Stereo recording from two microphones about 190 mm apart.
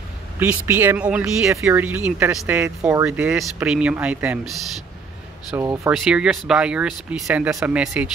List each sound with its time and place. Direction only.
0.4 s speech: 10° right (ahead or behind)
5.6 s speech: 15° right (ahead or behind)
5.9 s speech: 5° right (ahead or behind)